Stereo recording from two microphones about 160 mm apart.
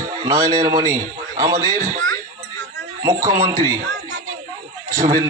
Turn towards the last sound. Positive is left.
turn(degrees=-20)  # may be behind; listen again after turning